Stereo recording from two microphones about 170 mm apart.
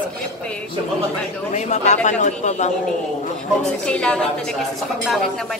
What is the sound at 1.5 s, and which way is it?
Speech, 45° left (ahead or behind).